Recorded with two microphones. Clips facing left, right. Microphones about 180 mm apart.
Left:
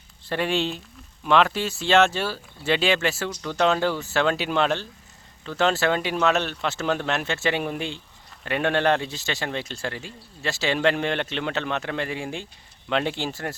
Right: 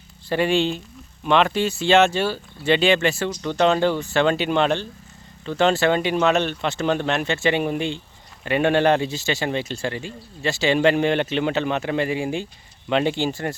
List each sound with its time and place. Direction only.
0.3 s a man's voice: centre (ahead or behind)